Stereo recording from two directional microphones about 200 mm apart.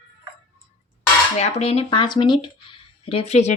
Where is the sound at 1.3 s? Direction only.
30° left (ahead or behind).